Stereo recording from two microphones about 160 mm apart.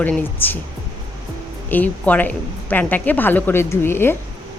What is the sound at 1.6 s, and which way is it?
Speech, 10° left (ahead or behind).